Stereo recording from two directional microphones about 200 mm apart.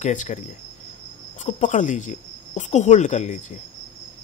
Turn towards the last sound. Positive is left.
turn(degrees=40)  # may be behind; listen again after turning